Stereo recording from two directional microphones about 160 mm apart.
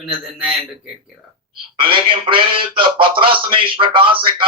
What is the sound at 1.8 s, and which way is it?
A man's voice, 35° right (ahead or behind).